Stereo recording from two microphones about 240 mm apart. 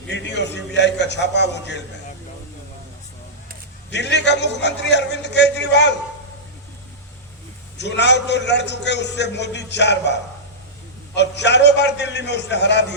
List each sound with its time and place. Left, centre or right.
0.1 s a man's voice: left
3.9 s a man's voice: left
7.8 s a man's voice: left